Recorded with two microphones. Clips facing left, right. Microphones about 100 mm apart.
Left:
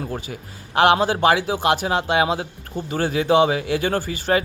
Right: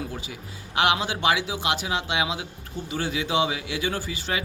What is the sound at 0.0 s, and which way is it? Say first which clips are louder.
A man's voice: left 5 dB; 45° left (ahead or behind).